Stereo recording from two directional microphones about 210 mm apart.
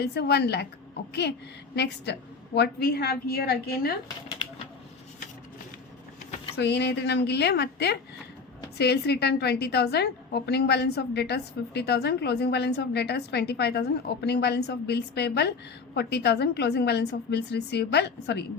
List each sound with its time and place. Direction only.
0.0 s a woman's voice: 50° left (ahead or behind)
1.7 s a woman's voice: 55° left (ahead or behind)
6.6 s a woman's voice: 50° left (ahead or behind)